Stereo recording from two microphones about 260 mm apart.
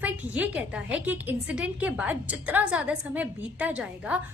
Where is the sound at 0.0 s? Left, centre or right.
Centre.